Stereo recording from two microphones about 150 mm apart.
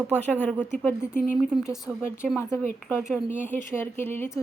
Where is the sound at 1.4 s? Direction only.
5° right (ahead or behind).